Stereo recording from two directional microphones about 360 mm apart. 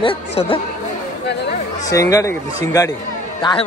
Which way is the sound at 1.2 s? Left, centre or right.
Left.